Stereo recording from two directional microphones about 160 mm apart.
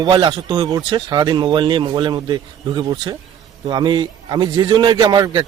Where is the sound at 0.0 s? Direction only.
30° right (ahead or behind).